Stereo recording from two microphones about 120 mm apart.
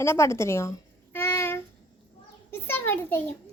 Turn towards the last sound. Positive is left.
turn(degrees=15)  # may be behind; listen again after turning